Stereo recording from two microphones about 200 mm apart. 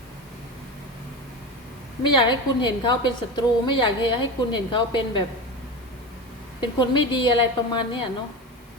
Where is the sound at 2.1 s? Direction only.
20° left (ahead or behind).